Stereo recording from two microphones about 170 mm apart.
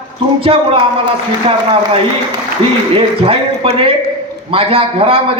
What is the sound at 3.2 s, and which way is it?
A man's voice, 35° right (ahead or behind).